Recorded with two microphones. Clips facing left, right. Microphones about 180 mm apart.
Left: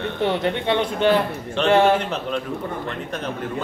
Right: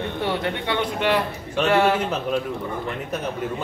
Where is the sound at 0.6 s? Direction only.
25° left (ahead or behind).